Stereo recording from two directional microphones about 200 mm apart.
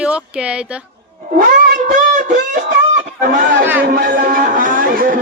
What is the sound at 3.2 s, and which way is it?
Speech, 45° right (ahead or behind).